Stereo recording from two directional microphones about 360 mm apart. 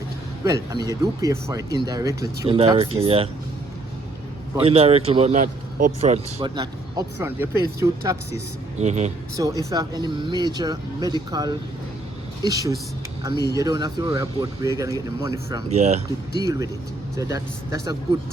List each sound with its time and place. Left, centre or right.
0.4 s speech: centre
4.5 s speech: centre
8.8 s speech: centre